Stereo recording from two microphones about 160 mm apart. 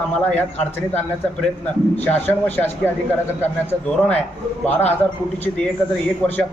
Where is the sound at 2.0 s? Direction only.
10° left (ahead or behind).